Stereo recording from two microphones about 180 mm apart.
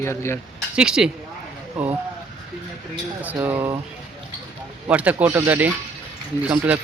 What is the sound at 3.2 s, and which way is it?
Speech, 10° right (ahead or behind).